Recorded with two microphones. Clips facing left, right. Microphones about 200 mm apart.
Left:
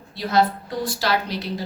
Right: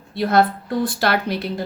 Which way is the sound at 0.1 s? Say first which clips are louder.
Right 3 dB; 55° right (ahead or behind).